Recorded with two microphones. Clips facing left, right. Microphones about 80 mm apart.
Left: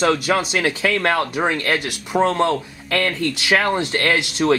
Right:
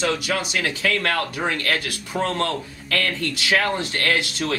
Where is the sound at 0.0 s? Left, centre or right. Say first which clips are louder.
Left 5 dB; left.